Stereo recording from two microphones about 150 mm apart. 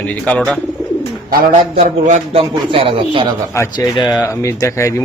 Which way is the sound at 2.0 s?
55° right (ahead or behind).